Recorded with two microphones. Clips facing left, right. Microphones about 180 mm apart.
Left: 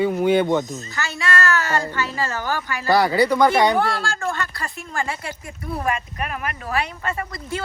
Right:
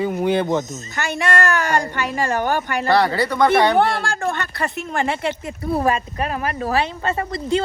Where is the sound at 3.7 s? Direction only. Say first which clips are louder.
Right 4 dB; 60° right (ahead or behind).